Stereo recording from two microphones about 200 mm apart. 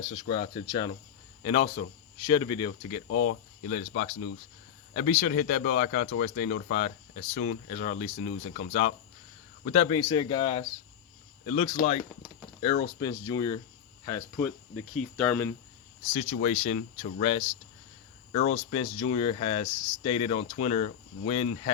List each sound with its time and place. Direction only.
0.1 s speech: 30° left (ahead or behind)
3.1 s speech: 90° left
3.7 s speech: 40° left (ahead or behind); by 15.5 s 10° left (ahead or behind)
16.1 s speech: 30° left (ahead or behind)